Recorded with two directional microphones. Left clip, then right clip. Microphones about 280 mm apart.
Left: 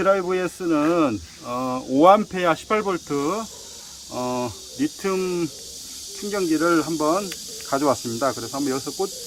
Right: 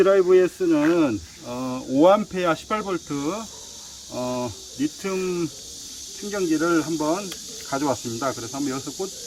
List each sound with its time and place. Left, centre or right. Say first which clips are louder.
0.0 s speech: right 4 dB; centre